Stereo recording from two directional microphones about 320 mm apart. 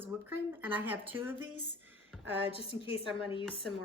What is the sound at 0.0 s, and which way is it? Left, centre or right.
Speech, centre.